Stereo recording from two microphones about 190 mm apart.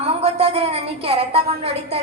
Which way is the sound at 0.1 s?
30° right (ahead or behind).